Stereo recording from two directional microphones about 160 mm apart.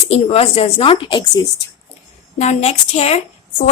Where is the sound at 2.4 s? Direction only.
45° left (ahead or behind).